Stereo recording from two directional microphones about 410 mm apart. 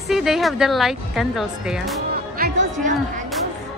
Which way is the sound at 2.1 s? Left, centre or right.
Right.